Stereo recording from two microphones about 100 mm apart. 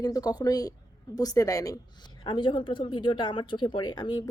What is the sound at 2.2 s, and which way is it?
Speech, 55° left (ahead or behind).